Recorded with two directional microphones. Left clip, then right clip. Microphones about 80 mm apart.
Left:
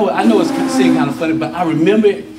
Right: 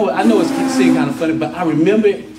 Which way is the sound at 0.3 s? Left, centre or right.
Centre.